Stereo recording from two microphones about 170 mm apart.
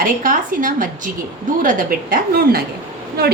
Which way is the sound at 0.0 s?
55° right (ahead or behind).